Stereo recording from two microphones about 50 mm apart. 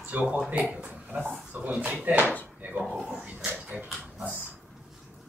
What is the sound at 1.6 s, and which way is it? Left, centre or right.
Speech, right.